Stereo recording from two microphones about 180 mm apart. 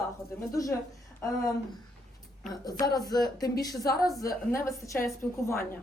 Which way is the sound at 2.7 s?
20° left (ahead or behind).